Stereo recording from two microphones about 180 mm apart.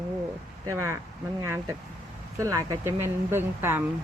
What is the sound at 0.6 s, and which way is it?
Speech, 15° right (ahead or behind).